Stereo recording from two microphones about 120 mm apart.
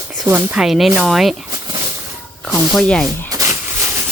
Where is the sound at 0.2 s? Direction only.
25° right (ahead or behind).